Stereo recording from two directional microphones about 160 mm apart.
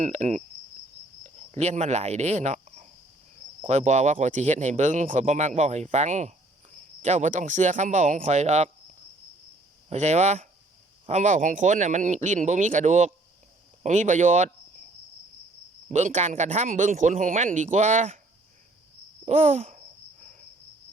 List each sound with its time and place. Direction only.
0.0 s speech: 50° right (ahead or behind)
9.9 s speech: 45° right (ahead or behind)
15.9 s speech: 45° right (ahead or behind)
19.2 s a sound: 50° right (ahead or behind)